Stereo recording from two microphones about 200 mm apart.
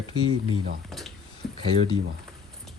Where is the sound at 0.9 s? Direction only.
Centre (ahead or behind).